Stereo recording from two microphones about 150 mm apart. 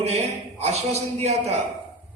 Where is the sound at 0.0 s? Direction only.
45° right (ahead or behind).